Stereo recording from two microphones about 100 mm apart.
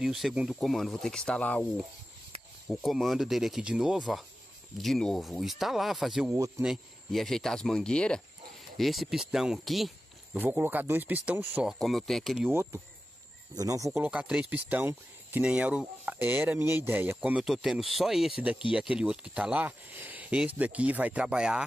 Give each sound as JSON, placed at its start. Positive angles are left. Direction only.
{"t": 0.0, "sound": "speech", "side_deg": -5}
{"t": 2.7, "sound": "speech", "side_deg": 0}
{"t": 10.3, "sound": "speech", "side_deg": -20}
{"t": 11.6, "sound": "speech", "side_deg": 0}
{"t": 12.4, "sound": "speech", "side_deg": -25}
{"t": 13.9, "sound": "speech", "side_deg": -15}
{"t": 17.5, "sound": "speech", "side_deg": -5}